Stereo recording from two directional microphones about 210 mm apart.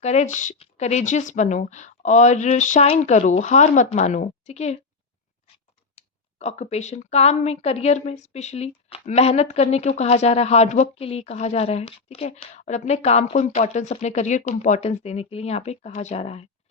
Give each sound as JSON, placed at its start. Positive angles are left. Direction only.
{"t": 0.0, "sound": "speech", "side_deg": 30}
{"t": 6.0, "sound": "speech", "side_deg": 30}